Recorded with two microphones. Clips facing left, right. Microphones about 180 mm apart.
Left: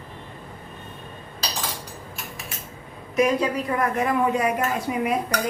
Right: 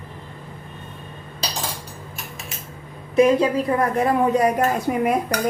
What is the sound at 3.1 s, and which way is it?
A woman's voice, 30° right (ahead or behind).